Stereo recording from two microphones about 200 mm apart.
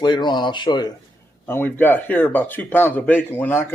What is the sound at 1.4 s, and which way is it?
Speech, 10° left (ahead or behind).